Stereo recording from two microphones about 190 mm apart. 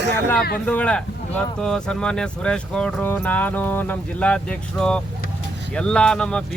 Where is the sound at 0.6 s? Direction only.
5° left (ahead or behind).